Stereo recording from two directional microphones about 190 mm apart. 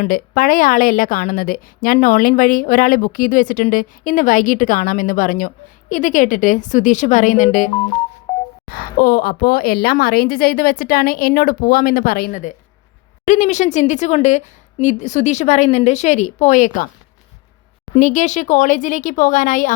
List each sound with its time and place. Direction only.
0.0 s a woman's voice: 45° left (ahead or behind)
8.3 s a sound: 10° left (ahead or behind)
8.6 s a woman's voice: 50° left (ahead or behind)
13.2 s a woman's voice: 40° left (ahead or behind)
17.9 s a woman's voice: 40° left (ahead or behind)